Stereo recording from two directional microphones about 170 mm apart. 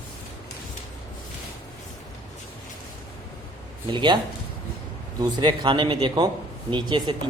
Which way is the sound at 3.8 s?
25° right (ahead or behind).